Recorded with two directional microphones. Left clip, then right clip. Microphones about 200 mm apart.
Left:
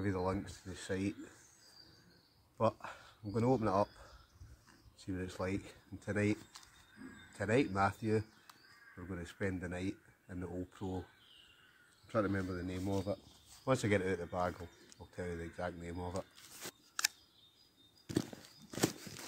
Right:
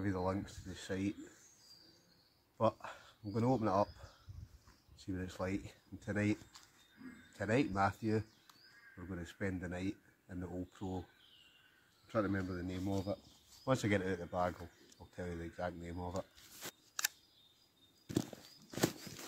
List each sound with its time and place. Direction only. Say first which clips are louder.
0.0 s speech: left 1 dB; centre (ahead or behind)
2.5 s speech: even; centre (ahead or behind)
12.1 s speech: left 1 dB; centre (ahead or behind)
18.1 s horse: left 1 dB; 15° right (ahead or behind)
18.7 s a sound: left 1 dB; centre (ahead or behind)